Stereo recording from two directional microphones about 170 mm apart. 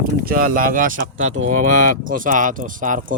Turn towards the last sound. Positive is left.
turn(degrees=-50)  # may be behind; listen again after turning